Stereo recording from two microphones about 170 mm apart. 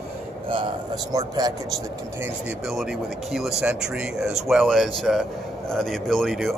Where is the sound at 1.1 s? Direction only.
20° right (ahead or behind).